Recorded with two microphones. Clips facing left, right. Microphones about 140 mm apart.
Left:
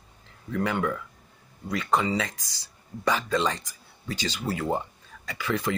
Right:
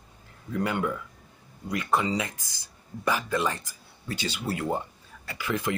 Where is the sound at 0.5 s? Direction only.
15° right (ahead or behind).